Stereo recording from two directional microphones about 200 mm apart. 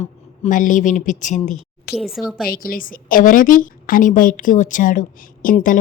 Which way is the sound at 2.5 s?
45° left (ahead or behind).